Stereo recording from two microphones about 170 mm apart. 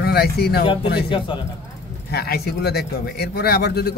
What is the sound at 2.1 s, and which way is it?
A man's voice, 70° left (ahead or behind).